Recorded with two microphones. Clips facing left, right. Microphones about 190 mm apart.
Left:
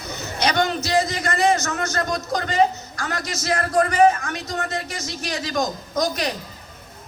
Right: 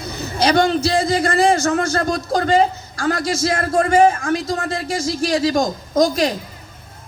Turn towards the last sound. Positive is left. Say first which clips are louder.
# right 7 dB
turn(degrees=-30)  # may be behind; listen again after turning